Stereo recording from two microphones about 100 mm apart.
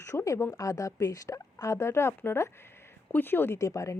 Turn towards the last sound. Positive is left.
turn(degrees=30)  # may be behind; listen again after turning